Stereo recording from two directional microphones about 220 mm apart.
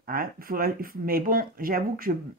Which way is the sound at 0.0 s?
40° right (ahead or behind).